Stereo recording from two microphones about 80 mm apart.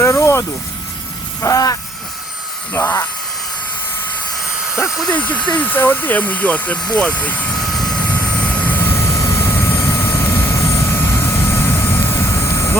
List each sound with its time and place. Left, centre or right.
0.0 s a sound: left
1.4 s speech: left
2.7 s speech: left
4.6 s speech: centre
5.1 s speech: centre
7.5 s vehicle: centre
8.0 s vehicle: centre; by 12.7 s left